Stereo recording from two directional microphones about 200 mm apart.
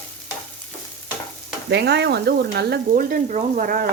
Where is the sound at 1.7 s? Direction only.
55° right (ahead or behind).